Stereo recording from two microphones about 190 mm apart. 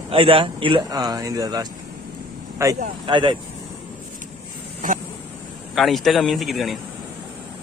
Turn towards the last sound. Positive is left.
turn(degrees=0)  # may be behind; listen again after turning